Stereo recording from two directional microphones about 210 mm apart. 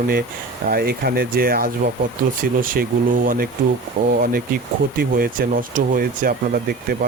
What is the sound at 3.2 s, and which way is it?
Speech, 45° right (ahead or behind).